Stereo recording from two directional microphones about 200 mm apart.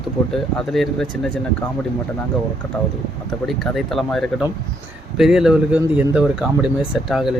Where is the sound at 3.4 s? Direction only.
Centre (ahead or behind).